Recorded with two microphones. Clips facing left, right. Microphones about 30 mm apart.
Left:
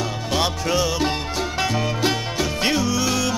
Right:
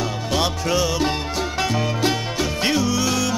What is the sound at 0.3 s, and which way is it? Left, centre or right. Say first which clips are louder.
Music: even; centre.